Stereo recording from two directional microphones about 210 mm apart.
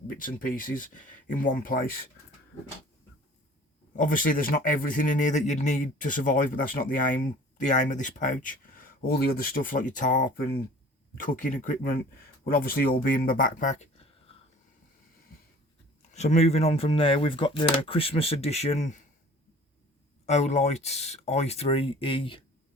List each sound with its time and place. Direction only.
0.2 s a man's voice: 40° left (ahead or behind)
3.9 s a man's voice: 40° left (ahead or behind)
14.3 s a sound: 25° left (ahead or behind)
16.1 s speech: 30° left (ahead or behind)
20.2 s a man's voice: 30° left (ahead or behind)